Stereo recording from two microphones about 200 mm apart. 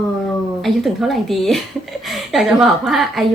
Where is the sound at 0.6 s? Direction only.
Centre (ahead or behind).